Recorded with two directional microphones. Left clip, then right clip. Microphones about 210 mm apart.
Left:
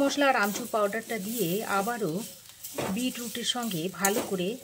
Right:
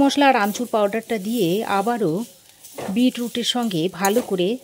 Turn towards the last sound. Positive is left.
turn(degrees=-40)  # may be behind; listen again after turning